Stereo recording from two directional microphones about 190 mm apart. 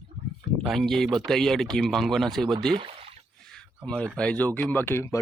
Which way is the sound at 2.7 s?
30° right (ahead or behind).